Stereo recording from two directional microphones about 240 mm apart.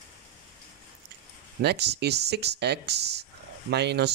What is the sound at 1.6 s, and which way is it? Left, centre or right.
Speech, right.